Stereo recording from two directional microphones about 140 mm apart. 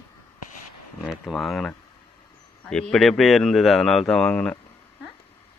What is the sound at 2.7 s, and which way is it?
Speech, 5° left (ahead or behind).